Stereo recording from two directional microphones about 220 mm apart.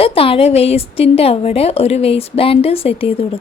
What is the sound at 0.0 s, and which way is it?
A woman's voice, 25° left (ahead or behind).